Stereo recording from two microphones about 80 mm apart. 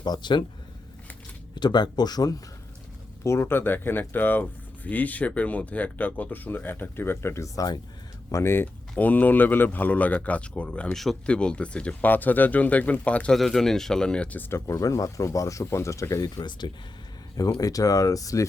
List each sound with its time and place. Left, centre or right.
0.0 s speech: left
1.5 s speech: left
3.2 s speech: left; by 10.9 s centre
10.9 s speech: centre
11.3 s speech: centre
13.3 s speech: centre
14.5 s speech: left
16.3 s speech: left
17.3 s speech: left